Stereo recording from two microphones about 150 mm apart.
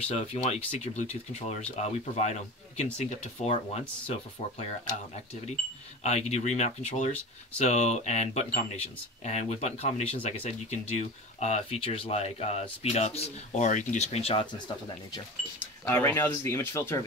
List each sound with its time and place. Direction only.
0.1 s speech: 45° left (ahead or behind)
6.0 s speech: 45° left (ahead or behind); by 15.2 s 30° left (ahead or behind)
15.8 s speech: 15° left (ahead or behind)